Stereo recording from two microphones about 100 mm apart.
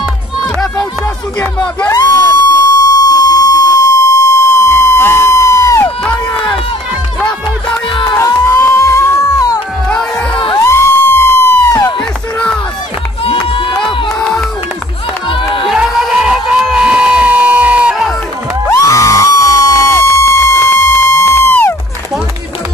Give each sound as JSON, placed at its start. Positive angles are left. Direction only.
{"t": 1.4, "sound": "speech", "side_deg": 15}
{"t": 1.9, "sound": "a sound", "side_deg": 30}
{"t": 2.8, "sound": "fire alarm", "side_deg": 35}
{"t": 8.5, "sound": "music", "side_deg": 30}
{"t": 9.8, "sound": "music", "side_deg": 10}
{"t": 10.6, "sound": "crowd", "side_deg": 25}
{"t": 12.0, "sound": "a sound", "side_deg": 10}
{"t": 13.2, "sound": "run", "side_deg": 65}
{"t": 13.7, "sound": "crowd", "side_deg": 5}
{"t": 16.3, "sound": "crowd", "side_deg": -5}
{"t": 18.7, "sound": "music", "side_deg": 35}